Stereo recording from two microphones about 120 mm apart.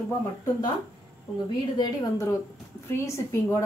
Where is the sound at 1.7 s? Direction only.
30° left (ahead or behind).